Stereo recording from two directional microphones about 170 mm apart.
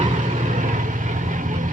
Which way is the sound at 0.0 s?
45° right (ahead or behind).